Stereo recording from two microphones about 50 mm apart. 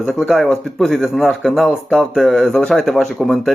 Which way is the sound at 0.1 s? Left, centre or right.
Centre.